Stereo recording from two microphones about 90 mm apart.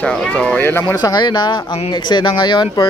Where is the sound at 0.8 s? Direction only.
50° left (ahead or behind).